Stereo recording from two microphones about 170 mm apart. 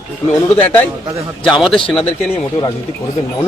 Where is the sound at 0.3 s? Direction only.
10° left (ahead or behind).